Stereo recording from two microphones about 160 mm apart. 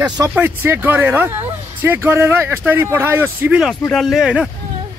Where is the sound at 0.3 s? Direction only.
15° right (ahead or behind).